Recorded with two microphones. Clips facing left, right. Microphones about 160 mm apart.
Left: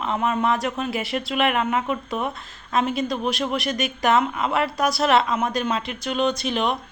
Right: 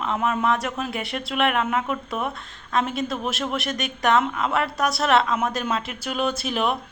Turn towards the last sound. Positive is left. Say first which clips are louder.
# left 1 dB
turn(degrees=-5)  # may be behind; listen again after turning